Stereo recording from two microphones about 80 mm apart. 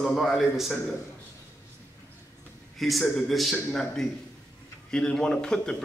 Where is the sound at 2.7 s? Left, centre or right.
Centre.